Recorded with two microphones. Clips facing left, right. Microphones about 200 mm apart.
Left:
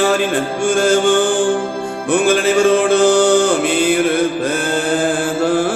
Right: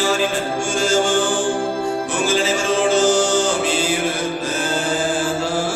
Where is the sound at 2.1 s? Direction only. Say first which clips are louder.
Left 9 dB; 60° left (ahead or behind).